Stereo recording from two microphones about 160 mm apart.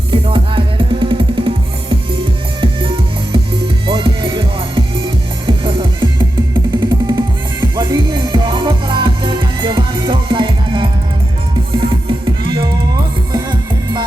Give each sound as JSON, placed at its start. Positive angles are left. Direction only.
{"t": 0.1, "sound": "music", "side_deg": -30}
{"t": 3.8, "sound": "music", "side_deg": -35}